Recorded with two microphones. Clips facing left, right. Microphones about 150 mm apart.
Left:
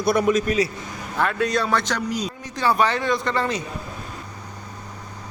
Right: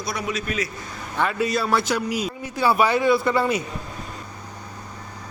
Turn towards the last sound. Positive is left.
turn(degrees=-10)  # may be behind; listen again after turning